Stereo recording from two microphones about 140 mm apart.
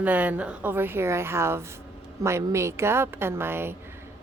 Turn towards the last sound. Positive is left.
turn(degrees=-15)  # may be behind; listen again after turning